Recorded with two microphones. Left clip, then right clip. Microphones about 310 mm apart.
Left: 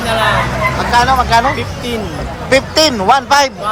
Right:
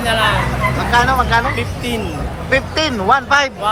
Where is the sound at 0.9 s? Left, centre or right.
Centre.